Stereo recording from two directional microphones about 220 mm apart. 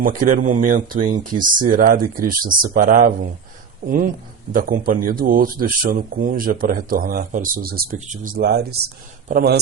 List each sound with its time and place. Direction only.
0.0 s a man's voice: 40° right (ahead or behind)